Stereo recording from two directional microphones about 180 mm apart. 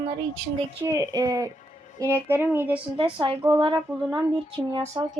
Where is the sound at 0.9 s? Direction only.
20° right (ahead or behind).